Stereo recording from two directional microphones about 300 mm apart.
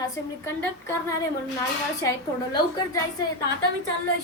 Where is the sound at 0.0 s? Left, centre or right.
Centre.